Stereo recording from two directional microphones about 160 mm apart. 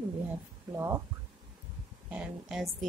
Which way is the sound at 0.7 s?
15° right (ahead or behind).